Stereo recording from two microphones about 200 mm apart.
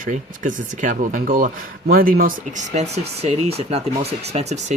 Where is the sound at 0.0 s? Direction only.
40° right (ahead or behind).